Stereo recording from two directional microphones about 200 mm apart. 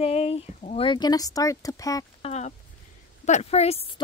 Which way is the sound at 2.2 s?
35° left (ahead or behind).